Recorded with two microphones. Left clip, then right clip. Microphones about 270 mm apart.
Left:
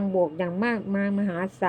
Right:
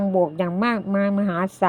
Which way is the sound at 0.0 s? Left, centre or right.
Right.